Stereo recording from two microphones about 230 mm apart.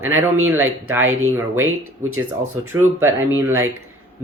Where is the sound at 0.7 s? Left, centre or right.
Centre.